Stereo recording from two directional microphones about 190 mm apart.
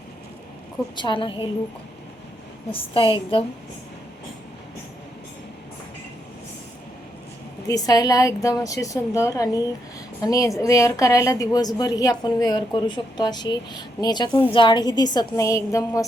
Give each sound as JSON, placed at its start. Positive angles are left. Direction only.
{"t": 0.9, "sound": "a woman's voice", "side_deg": 25}
{"t": 2.7, "sound": "a woman's voice", "side_deg": 30}
{"t": 7.7, "sound": "a woman's voice", "side_deg": 20}